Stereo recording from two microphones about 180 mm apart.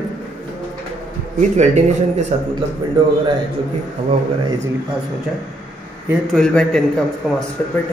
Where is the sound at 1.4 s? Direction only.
40° right (ahead or behind).